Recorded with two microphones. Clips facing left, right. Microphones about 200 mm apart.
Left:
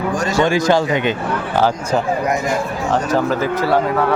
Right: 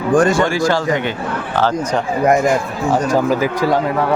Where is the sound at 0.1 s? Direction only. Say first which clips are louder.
Right 8 dB; 50° right (ahead or behind).